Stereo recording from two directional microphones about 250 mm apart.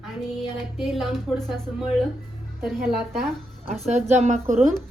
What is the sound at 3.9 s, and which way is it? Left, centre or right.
Speech, right.